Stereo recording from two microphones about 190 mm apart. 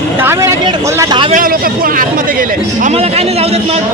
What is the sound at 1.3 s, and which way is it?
Speech, 45° right (ahead or behind).